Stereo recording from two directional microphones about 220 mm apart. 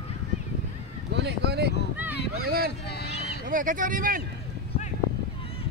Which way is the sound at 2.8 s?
50° left (ahead or behind).